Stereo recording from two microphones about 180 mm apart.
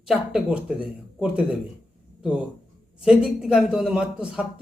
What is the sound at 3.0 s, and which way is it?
A man's voice, 5° right (ahead or behind).